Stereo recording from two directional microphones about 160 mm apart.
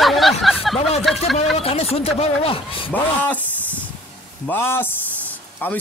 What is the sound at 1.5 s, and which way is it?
A woman's voice, 40° left (ahead or behind).